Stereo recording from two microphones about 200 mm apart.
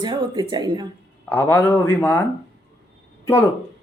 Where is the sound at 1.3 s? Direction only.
10° left (ahead or behind).